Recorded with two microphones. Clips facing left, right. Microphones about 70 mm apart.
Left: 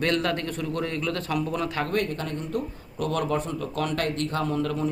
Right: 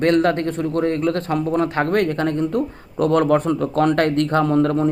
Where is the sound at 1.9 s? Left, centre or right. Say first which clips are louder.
Right 9 dB; right.